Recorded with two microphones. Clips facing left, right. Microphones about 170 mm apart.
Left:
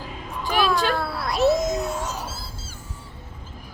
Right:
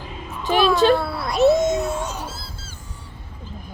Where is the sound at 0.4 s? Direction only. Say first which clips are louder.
Right 4 dB; 25° right (ahead or behind).